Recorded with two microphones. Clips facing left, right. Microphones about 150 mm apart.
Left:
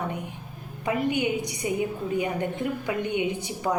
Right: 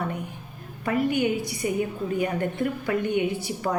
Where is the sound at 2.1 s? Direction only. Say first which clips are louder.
Right 2 dB; 20° left (ahead or behind).